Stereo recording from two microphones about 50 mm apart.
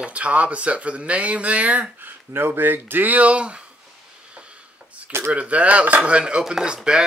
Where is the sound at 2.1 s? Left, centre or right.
Right.